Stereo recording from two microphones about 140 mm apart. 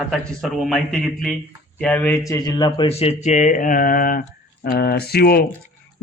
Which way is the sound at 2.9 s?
45° left (ahead or behind).